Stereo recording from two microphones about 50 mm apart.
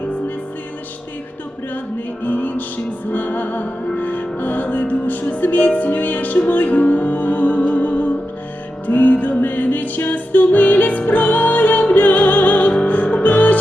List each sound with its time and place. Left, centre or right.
2.2 s music: left